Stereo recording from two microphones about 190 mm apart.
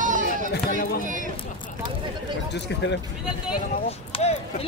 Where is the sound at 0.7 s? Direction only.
50° left (ahead or behind).